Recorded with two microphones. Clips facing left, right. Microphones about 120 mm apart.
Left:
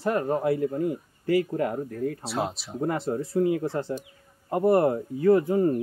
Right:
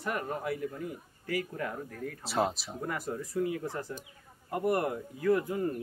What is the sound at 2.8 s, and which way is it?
Speech, 30° left (ahead or behind).